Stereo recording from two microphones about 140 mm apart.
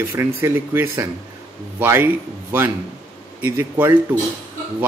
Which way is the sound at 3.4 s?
15° right (ahead or behind).